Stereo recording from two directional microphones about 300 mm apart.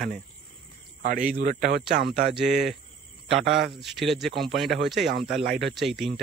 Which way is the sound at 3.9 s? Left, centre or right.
Centre.